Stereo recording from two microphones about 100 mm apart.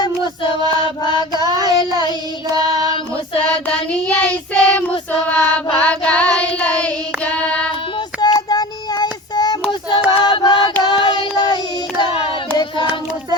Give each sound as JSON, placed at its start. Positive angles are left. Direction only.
{"t": 0.7, "sound": "mantra", "side_deg": 50}
{"t": 1.5, "sound": "child singing", "side_deg": -40}
{"t": 2.8, "sound": "female singing", "side_deg": 60}
{"t": 3.4, "sound": "child singing", "side_deg": 10}
{"t": 8.2, "sound": "child singing", "side_deg": 40}
{"t": 10.2, "sound": "music", "side_deg": 55}
{"t": 10.8, "sound": "child singing", "side_deg": 50}
{"t": 12.5, "sound": "a sound", "side_deg": 50}